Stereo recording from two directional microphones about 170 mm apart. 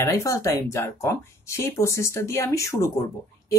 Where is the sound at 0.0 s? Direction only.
15° left (ahead or behind).